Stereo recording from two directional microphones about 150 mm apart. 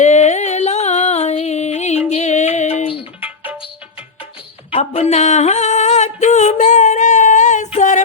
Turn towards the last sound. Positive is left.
turn(degrees=55)  # may be behind; listen again after turning